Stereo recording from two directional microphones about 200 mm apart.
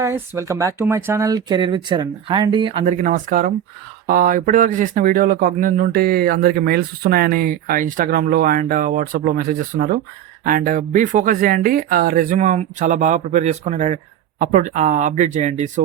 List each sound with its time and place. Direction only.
0.0 s speech: 15° right (ahead or behind)
2.8 s speech: 40° right (ahead or behind)